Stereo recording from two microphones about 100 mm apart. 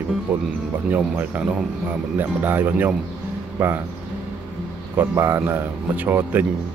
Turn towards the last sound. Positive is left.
turn(degrees=-20)  # may be behind; listen again after turning